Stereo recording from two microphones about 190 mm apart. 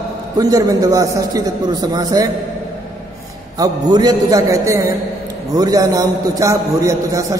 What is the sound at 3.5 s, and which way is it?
A man's voice, 20° right (ahead or behind).